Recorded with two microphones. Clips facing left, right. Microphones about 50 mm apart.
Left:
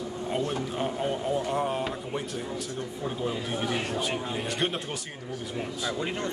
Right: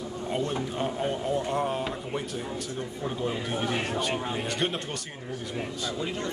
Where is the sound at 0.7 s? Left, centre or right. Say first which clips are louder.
Left 1 dB; centre.